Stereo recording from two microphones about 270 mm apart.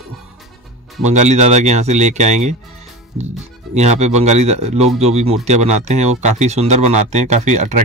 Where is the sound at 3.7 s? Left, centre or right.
Right.